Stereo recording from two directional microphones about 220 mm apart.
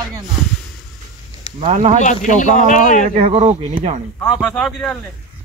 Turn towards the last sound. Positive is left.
turn(degrees=0)  # may be behind; listen again after turning